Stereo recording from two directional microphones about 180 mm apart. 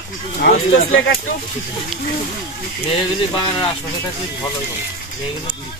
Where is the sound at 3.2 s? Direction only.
25° left (ahead or behind).